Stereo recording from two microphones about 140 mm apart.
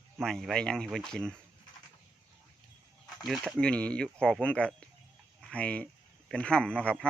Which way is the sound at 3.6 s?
10° left (ahead or behind).